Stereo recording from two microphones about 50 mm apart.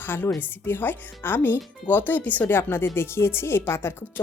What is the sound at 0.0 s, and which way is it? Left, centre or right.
A woman's voice, left.